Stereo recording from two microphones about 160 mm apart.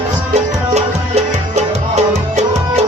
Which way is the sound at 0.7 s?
45° right (ahead or behind).